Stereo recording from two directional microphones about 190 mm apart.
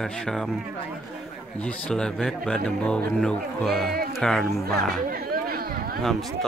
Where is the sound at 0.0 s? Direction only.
Centre (ahead or behind).